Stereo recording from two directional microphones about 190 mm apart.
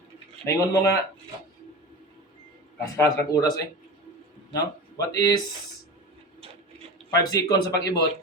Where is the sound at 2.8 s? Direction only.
15° left (ahead or behind).